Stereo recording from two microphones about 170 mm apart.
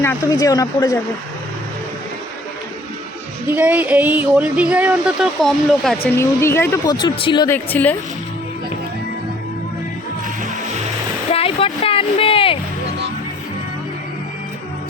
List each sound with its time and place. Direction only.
0.0 s speech: 15° left (ahead or behind)
3.4 s speech: 10° right (ahead or behind)
6.1 s speech: 15° left (ahead or behind)
6.9 s speech: 30° left (ahead or behind)
7.4 s speech: 10° left (ahead or behind)
11.3 s a sound: 35° left (ahead or behind)